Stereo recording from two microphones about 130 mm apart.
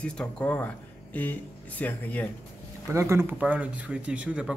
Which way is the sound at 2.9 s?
20° right (ahead or behind).